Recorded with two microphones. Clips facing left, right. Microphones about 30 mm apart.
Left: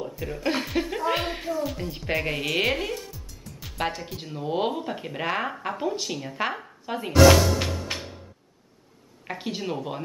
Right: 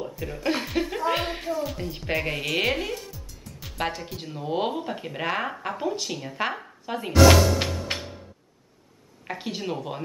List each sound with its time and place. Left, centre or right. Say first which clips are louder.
0.0 s speech: even; centre
7.6 s music: right 1 dB; right
9.3 s speech: even; centre